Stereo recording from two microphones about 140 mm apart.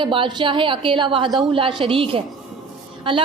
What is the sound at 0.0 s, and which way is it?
A woman's voice, 35° right (ahead or behind).